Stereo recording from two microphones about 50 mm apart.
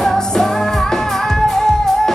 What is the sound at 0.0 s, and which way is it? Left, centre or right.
Music, centre.